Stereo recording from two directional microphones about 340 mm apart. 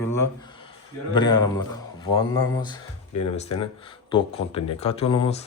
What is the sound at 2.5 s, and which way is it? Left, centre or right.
Speech, centre.